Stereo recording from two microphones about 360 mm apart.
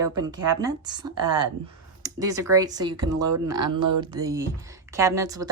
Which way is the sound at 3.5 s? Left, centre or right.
Right.